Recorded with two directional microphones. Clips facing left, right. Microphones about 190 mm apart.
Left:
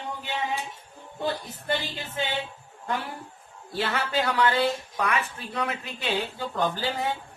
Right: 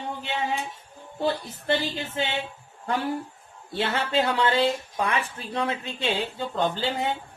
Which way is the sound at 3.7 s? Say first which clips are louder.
Right 2 dB; 25° right (ahead or behind).